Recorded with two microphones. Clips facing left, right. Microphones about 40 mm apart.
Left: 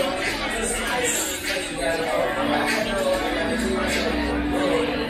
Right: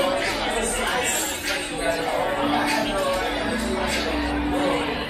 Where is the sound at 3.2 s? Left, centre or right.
Centre.